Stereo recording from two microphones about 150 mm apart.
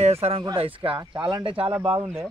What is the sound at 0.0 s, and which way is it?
Speech, 40° right (ahead or behind).